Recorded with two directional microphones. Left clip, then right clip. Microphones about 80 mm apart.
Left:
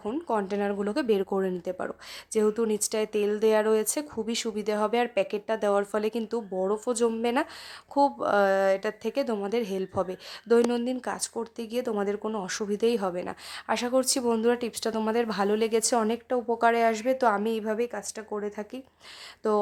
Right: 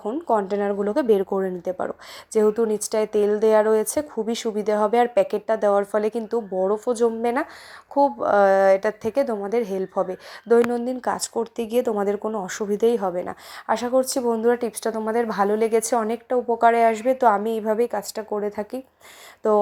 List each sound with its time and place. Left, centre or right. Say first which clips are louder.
0.0 s a sound: right 7 dB; centre
0.4 s speech: right 5 dB; centre
0.7 s speech: right 8 dB; centre
5.5 s speech: right 5 dB; centre
7.9 s speech: right 4 dB; centre
8.3 s speech: right 10 dB; centre
9.2 s speech: right 5 dB; centre
11.0 s speech: right 8 dB; centre
12.2 s speech: right 5 dB; centre
12.5 s speech: right 6 dB; centre
13.9 s speech: right 4 dB; centre
17.9 s speech: right 8 dB; right
18.3 s speech: right 6 dB; centre